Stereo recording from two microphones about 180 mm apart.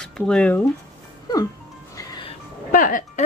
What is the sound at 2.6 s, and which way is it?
Music, 50° left (ahead or behind).